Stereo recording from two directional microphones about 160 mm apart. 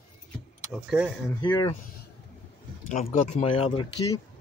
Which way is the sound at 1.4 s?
25° left (ahead or behind).